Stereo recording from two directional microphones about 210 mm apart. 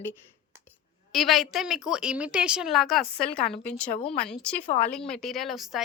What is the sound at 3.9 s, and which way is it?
Speech, 30° left (ahead or behind).